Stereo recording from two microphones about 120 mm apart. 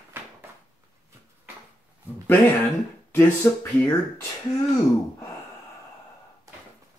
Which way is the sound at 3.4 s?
15° left (ahead or behind).